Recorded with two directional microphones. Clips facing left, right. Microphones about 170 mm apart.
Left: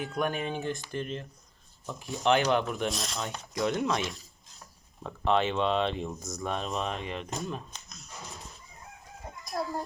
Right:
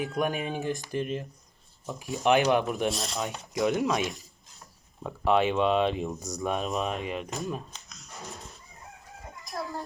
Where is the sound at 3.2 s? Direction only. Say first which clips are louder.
Right 3 dB; 15° right (ahead or behind); by 7.6 s centre (ahead or behind).